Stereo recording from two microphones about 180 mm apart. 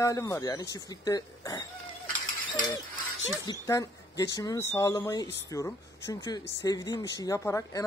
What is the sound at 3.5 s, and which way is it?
Speech, 20° left (ahead or behind).